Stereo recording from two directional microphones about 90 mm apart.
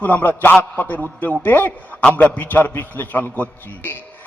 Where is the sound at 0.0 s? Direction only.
20° left (ahead or behind).